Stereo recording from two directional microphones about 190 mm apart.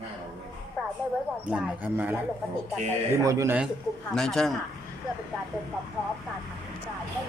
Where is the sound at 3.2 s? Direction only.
15° right (ahead or behind).